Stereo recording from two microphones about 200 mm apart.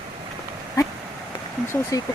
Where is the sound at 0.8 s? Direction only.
15° left (ahead or behind).